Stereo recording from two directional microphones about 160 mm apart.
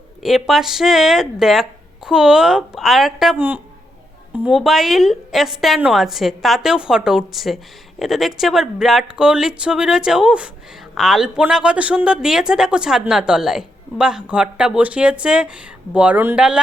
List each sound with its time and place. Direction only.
0.2 s speech: centre (ahead or behind)